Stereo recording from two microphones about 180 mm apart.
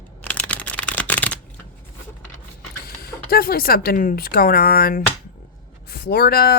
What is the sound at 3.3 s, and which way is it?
Speech, 55° left (ahead or behind).